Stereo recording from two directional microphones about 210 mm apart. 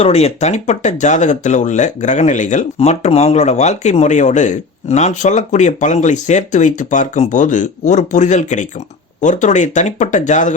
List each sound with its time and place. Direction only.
0.0 s speech: 30° left (ahead or behind)